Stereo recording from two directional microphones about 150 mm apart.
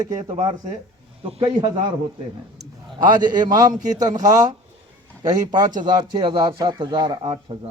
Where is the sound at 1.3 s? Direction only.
40° right (ahead or behind).